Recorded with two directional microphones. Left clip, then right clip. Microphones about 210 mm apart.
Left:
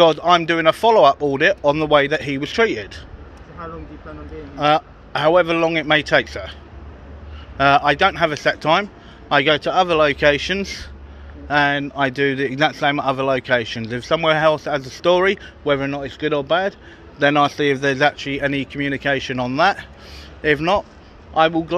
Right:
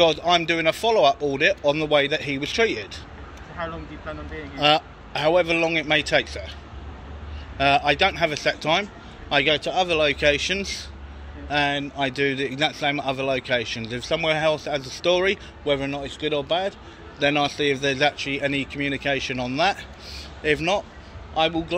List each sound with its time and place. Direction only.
0.0 s a man's voice: 35° left (ahead or behind)
4.6 s a man's voice: 20° left (ahead or behind)
7.5 s a man's voice: 35° left (ahead or behind)
17.2 s a man's voice: 30° left (ahead or behind)